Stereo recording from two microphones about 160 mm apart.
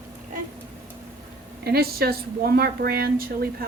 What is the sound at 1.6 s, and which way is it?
A woman's voice, 75° right (ahead or behind).